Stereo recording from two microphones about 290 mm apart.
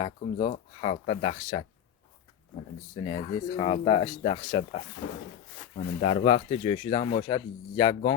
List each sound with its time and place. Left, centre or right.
0.0 s speech: centre
3.0 s speech: centre